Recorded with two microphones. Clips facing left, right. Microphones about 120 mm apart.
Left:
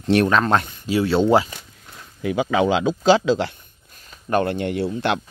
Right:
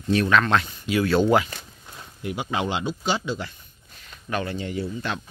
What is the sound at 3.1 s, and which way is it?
Speech, 90° left.